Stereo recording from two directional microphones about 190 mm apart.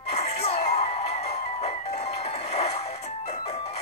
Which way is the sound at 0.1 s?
35° left (ahead or behind).